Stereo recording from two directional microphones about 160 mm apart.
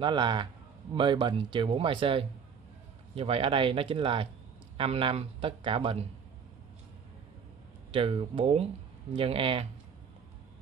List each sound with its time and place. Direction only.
0.0 s speech: 30° right (ahead or behind)
7.9 s speech: 35° right (ahead or behind)